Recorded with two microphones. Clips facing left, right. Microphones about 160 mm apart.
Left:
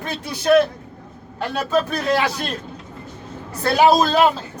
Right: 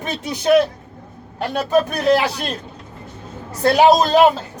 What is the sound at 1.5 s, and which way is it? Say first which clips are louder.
Speech: right 3 dB; 15° right (ahead or behind).